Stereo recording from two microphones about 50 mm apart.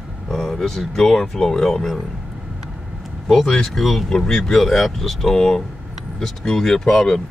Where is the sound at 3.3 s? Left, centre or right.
Centre.